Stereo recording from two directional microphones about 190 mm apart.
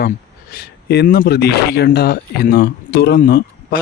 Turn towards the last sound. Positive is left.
turn(degrees=55)  # may be behind; listen again after turning